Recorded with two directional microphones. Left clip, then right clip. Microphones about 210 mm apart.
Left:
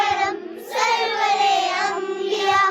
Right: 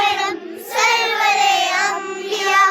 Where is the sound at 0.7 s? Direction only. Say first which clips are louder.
Right 4 dB; 5° right (ahead or behind).